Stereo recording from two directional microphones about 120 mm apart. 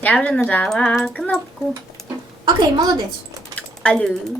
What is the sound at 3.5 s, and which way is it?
Typing, 10° left (ahead or behind).